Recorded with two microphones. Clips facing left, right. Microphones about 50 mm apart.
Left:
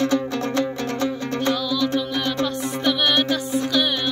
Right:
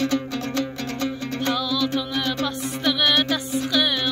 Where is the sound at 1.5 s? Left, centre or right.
Centre.